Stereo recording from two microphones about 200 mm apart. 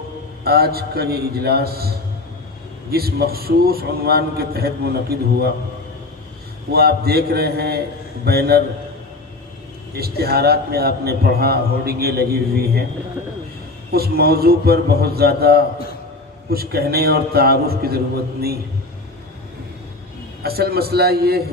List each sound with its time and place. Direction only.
0.4 s a man's voice: 50° right (ahead or behind)
2.9 s a man's voice: 50° right (ahead or behind)
6.7 s a man's voice: 50° right (ahead or behind)
9.9 s a man's voice: 50° right (ahead or behind)
13.9 s a man's voice: 50° right (ahead or behind)
20.4 s a man's voice: 50° right (ahead or behind)